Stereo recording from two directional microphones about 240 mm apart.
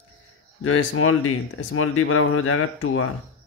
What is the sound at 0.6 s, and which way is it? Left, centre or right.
Speech, left.